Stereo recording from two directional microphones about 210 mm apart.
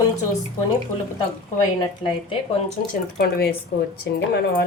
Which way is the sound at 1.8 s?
25° left (ahead or behind).